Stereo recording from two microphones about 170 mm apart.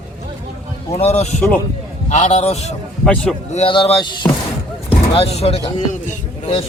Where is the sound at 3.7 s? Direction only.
30° left (ahead or behind).